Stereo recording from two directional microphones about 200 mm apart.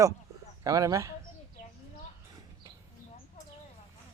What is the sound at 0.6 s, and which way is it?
Speech, 15° right (ahead or behind).